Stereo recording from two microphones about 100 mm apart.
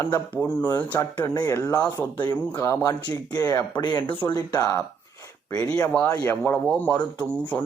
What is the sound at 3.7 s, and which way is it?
Speech, 50° left (ahead or behind).